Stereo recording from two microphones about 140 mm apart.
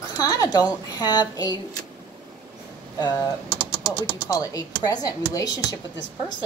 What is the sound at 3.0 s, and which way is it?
Speech, 30° left (ahead or behind).